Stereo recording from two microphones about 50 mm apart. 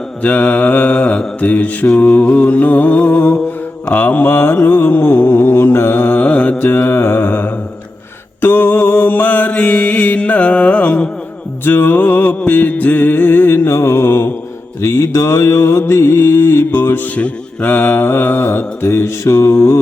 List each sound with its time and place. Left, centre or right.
0.2 s mantra: left
6.1 s mantra: left
11.6 s music: left
13.7 s mantra: left
14.8 s mantra: left
15.9 s music: left
17.2 s mantra: left